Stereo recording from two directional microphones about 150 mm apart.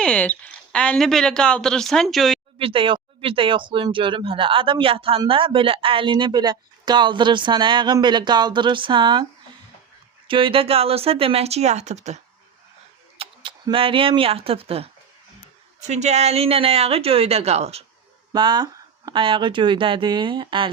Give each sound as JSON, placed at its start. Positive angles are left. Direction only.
{"t": 0.0, "sound": "speech", "side_deg": 10}
{"t": 2.6, "sound": "speech", "side_deg": -35}
{"t": 10.2, "sound": "speech", "side_deg": -35}
{"t": 13.1, "sound": "a woman's voice", "side_deg": -35}
{"t": 18.3, "sound": "speech", "side_deg": -30}